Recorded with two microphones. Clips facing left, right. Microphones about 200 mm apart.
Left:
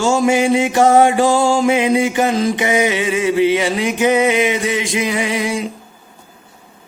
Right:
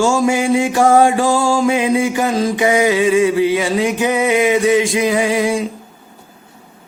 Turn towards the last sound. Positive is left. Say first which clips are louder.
# right 4 dB
turn(degrees=20)  # may be behind; listen again after turning